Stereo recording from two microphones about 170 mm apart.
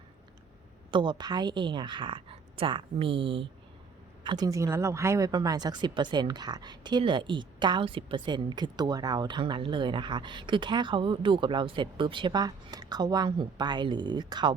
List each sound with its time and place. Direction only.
0.9 s speech: 25° right (ahead or behind)